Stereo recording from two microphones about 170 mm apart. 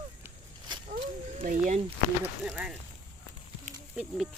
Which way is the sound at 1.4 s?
45° right (ahead or behind).